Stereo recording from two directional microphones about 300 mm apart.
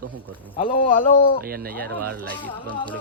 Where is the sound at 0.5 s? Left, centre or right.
Centre.